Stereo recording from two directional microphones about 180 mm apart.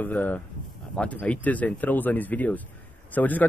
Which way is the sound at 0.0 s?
10° left (ahead or behind).